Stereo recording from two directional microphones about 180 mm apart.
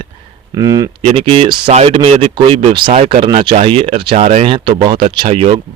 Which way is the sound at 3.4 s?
30° right (ahead or behind).